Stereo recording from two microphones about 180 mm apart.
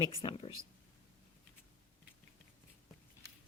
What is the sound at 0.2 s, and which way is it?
Speech, 25° left (ahead or behind).